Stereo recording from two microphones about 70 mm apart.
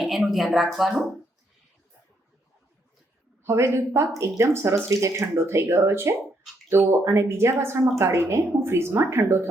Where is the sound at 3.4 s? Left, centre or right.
Right.